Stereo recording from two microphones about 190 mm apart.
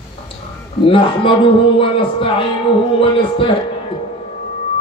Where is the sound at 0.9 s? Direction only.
30° left (ahead or behind).